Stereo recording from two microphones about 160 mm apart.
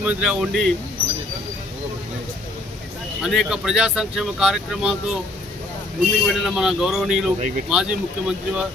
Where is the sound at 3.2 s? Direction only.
Centre (ahead or behind).